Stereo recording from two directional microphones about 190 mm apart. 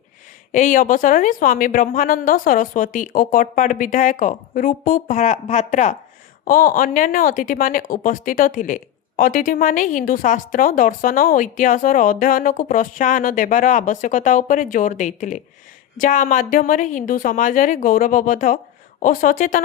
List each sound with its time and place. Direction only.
0.5 s speech: 45° left (ahead or behind)
6.4 s speech: 50° left (ahead or behind)